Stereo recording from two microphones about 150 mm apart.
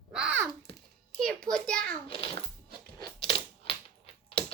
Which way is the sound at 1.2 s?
5° left (ahead or behind).